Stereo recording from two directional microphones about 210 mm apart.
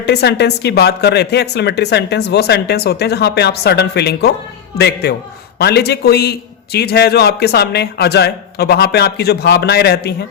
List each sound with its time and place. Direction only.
0.0 s speech: 50° left (ahead or behind)